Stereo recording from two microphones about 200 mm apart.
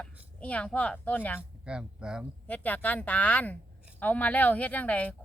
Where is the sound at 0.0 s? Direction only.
5° left (ahead or behind).